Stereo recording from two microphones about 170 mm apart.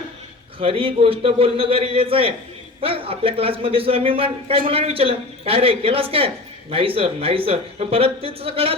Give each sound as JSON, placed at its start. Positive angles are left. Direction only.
{"t": 0.6, "sound": "a man's voice", "side_deg": -35}